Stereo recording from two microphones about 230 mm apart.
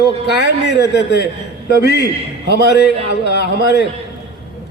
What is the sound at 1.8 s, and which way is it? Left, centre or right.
Speech, left.